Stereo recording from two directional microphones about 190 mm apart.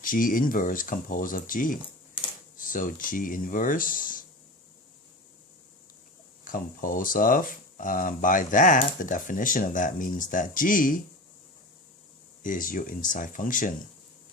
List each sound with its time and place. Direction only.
0.0 s speech: 45° left (ahead or behind)
6.4 s speech: 45° left (ahead or behind)
12.4 s speech: 45° left (ahead or behind)